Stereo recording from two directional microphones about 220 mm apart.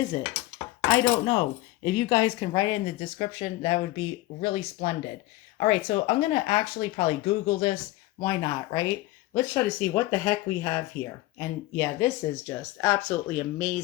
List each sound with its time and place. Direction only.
0.1 s speech: 20° left (ahead or behind)
0.9 s chopping: 15° left (ahead or behind)
1.3 s speech: 20° left (ahead or behind); by 13.8 s 5° left (ahead or behind)